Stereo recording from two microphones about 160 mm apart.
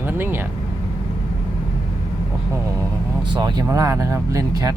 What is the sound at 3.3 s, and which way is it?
Speech, 30° right (ahead or behind).